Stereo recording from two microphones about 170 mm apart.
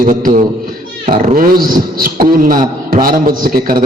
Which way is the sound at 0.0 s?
55° right (ahead or behind).